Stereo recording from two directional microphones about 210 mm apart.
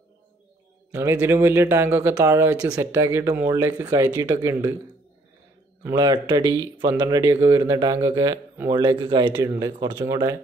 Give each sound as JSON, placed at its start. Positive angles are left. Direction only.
{"t": 0.9, "sound": "speech", "side_deg": -10}
{"t": 5.9, "sound": "speech", "side_deg": -20}